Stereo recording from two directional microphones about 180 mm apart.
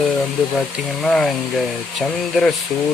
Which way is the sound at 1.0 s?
5° left (ahead or behind).